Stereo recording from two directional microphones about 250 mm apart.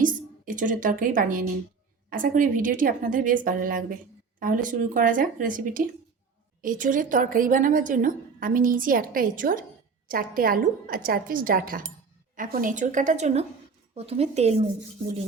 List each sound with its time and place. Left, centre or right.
0.0 s a woman's voice: right